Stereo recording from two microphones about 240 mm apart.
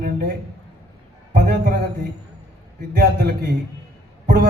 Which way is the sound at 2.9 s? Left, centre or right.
Right.